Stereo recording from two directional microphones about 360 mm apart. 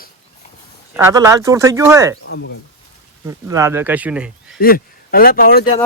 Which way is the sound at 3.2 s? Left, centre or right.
Centre.